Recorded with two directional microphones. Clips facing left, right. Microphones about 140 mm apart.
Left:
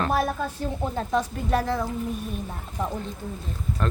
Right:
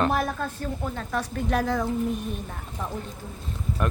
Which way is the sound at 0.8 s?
30° left (ahead or behind).